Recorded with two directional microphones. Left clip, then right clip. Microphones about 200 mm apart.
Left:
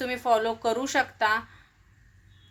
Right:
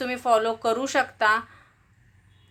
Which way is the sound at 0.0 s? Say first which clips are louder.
Right 2 dB; 10° right (ahead or behind).